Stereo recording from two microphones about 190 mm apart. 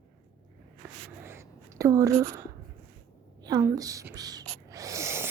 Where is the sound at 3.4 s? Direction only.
20° right (ahead or behind).